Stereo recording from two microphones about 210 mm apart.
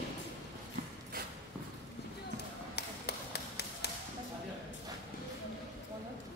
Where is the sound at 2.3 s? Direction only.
50° left (ahead or behind).